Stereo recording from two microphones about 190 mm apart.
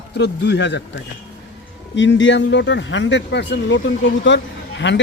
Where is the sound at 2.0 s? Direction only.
75° left (ahead or behind).